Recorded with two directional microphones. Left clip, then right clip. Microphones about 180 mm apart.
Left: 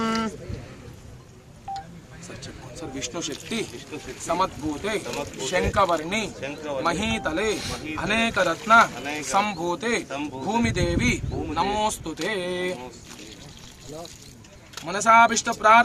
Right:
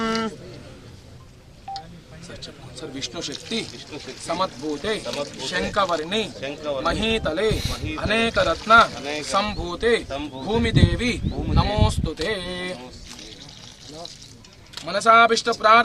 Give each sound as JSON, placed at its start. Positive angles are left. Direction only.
{"t": 0.1, "sound": "a sound", "side_deg": 20}
{"t": 2.9, "sound": "a man's voice", "side_deg": 0}
{"t": 14.8, "sound": "a man's voice", "side_deg": -5}